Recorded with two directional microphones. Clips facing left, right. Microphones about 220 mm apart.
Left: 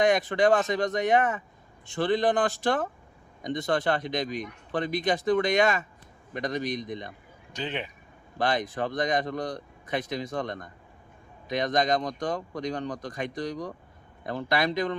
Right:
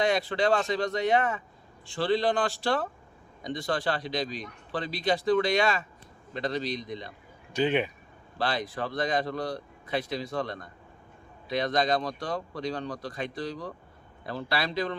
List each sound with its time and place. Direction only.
0.0 s a man's voice: 20° left (ahead or behind)
7.5 s speech: 10° right (ahead or behind)
8.4 s a man's voice: 20° left (ahead or behind)